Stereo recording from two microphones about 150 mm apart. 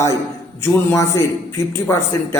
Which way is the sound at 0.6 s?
20° left (ahead or behind).